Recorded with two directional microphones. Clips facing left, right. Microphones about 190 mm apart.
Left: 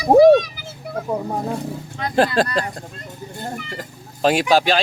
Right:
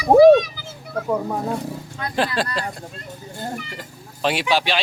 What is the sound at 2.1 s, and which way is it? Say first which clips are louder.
Speech: left 5 dB; 45° left (ahead or behind).